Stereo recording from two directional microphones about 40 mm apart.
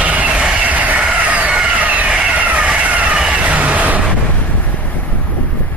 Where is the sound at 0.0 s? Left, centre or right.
Right.